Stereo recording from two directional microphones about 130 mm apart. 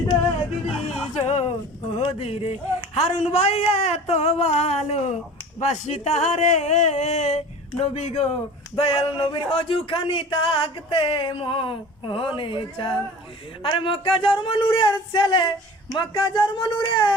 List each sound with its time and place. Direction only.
1.1 s a man's voice: 55° left (ahead or behind)
8.8 s a sound: 50° left (ahead or behind)
12.4 s speech: 40° left (ahead or behind)